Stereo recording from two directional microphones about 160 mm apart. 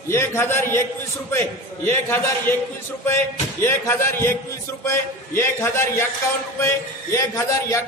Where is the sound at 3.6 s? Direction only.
15° left (ahead or behind).